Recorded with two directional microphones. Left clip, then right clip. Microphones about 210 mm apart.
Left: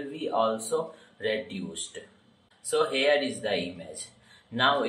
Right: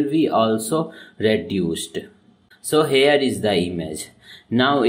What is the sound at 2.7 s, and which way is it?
Speech, 45° right (ahead or behind).